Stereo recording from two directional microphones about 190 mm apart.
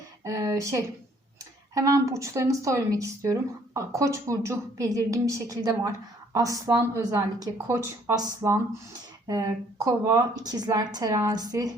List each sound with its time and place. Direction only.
0.3 s speech: 15° right (ahead or behind)